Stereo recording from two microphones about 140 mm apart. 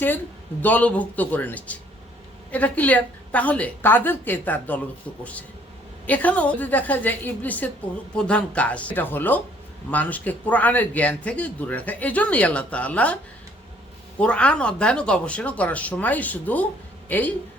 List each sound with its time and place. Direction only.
0.6 s a man's voice: 10° left (ahead or behind)
14.2 s a man's voice: 10° left (ahead or behind)